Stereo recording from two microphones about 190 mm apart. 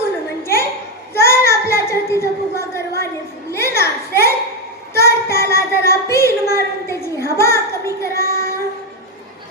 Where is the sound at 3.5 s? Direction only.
15° left (ahead or behind).